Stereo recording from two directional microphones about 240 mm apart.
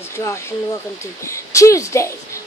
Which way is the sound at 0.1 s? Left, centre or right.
Centre.